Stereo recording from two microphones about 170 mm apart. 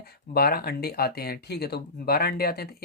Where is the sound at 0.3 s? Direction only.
65° left (ahead or behind).